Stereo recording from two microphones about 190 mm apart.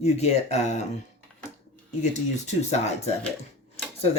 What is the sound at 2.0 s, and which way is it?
Speech, 35° left (ahead or behind).